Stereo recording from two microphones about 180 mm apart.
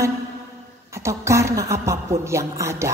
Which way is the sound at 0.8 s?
15° right (ahead or behind).